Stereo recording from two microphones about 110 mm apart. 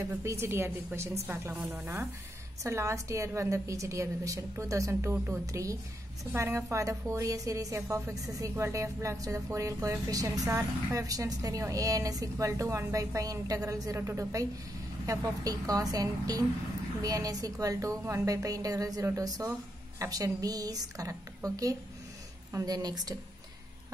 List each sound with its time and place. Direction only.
0.1 s a woman's voice: 25° right (ahead or behind)
5.1 s a woman's voice: 20° right (ahead or behind)
5.5 s a woman's voice: 30° right (ahead or behind)